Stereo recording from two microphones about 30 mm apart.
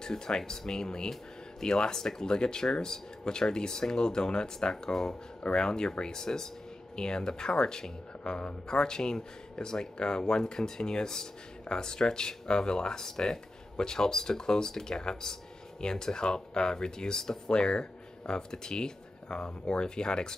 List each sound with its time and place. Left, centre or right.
0.0 s speech: left